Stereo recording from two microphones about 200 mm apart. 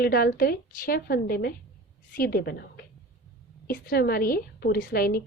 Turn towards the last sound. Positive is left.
turn(degrees=50)  # may be behind; listen again after turning